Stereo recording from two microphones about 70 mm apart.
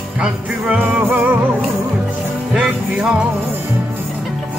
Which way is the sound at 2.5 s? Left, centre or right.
Centre.